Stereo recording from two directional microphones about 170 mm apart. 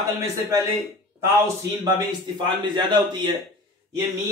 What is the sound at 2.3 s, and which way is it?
A man's voice, 25° right (ahead or behind).